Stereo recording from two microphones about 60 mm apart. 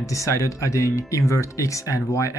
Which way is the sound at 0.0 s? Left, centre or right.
Left.